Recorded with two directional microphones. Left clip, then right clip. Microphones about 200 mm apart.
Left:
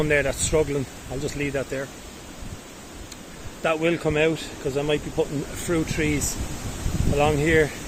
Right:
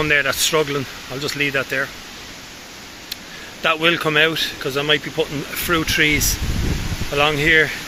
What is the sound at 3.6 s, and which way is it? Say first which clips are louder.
Speech: right 5 dB; 5° left (ahead or behind).